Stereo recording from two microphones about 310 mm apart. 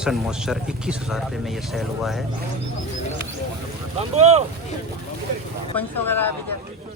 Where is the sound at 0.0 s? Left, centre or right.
Centre.